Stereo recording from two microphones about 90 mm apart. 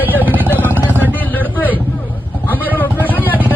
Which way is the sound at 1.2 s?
20° left (ahead or behind).